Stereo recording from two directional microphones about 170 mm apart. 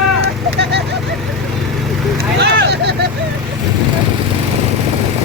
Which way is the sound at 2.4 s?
80° right.